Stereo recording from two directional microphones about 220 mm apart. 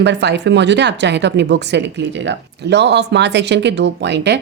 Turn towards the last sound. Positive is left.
turn(degrees=-55)  # may be behind; listen again after turning